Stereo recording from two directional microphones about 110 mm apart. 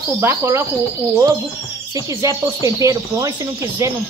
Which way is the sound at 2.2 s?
30° right (ahead or behind).